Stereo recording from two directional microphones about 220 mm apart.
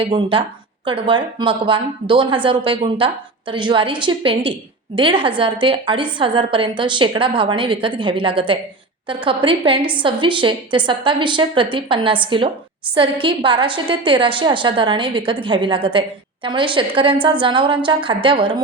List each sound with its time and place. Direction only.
0.0 s a woman's voice: 25° right (ahead or behind)